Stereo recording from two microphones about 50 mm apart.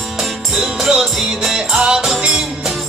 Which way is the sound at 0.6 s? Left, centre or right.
Centre.